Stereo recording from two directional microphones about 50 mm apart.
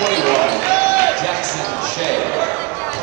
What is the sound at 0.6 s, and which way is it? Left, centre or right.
Basketball bounce, right.